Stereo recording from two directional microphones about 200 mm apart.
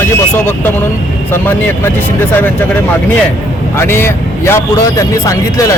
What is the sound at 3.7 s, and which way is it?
Speech, 10° left (ahead or behind).